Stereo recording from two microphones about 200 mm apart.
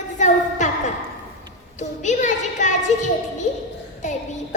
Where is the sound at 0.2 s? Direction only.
35° left (ahead or behind).